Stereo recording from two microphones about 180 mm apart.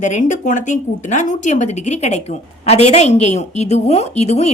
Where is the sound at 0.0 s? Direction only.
45° left (ahead or behind).